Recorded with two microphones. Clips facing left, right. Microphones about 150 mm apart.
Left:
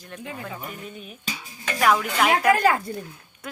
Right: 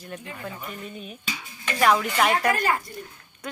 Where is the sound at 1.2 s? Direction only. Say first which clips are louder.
Left 1 dB; 40° left (ahead or behind).